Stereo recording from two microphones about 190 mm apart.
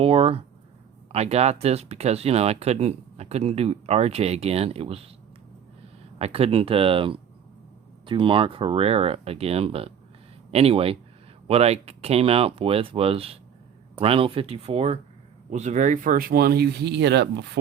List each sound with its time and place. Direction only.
0.0 s speech: 30° right (ahead or behind)
6.1 s speech: 30° right (ahead or behind); by 17.6 s 65° right (ahead or behind)